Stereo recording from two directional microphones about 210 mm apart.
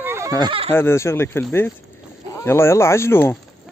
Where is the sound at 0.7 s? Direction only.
10° left (ahead or behind).